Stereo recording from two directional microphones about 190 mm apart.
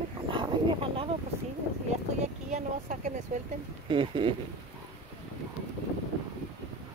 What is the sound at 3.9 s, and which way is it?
Speech, 25° right (ahead or behind).